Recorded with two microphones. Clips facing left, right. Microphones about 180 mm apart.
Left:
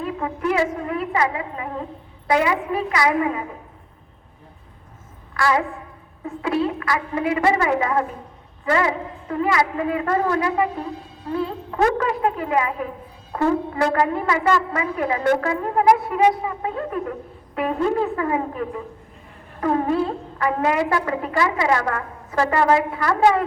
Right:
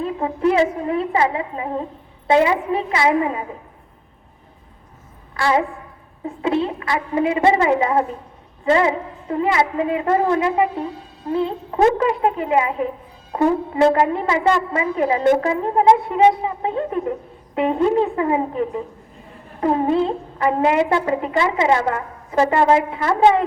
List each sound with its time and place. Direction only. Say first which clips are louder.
0.0 s a woman's voice: right 5 dB; 25° right (ahead or behind)
5.3 s a woman's voice: right 2 dB; 25° right (ahead or behind)